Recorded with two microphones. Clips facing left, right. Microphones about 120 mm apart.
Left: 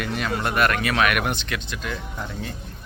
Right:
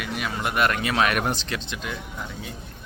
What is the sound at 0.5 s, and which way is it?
Speech, 20° right (ahead or behind).